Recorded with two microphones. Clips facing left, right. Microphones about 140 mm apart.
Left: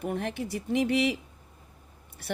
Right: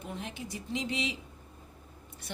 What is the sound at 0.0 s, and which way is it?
Speech, 65° left (ahead or behind).